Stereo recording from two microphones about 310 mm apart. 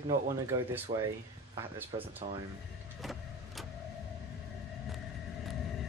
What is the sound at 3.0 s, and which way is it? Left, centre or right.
Vehicle, centre.